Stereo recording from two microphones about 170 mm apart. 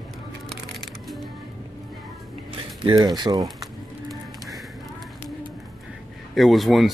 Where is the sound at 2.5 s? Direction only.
30° right (ahead or behind).